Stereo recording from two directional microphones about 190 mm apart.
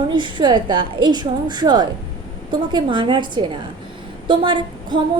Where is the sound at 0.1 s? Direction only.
25° right (ahead or behind).